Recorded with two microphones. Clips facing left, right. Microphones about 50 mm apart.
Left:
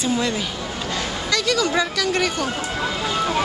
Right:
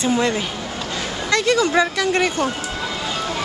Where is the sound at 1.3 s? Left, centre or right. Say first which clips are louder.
Right 4 dB; right.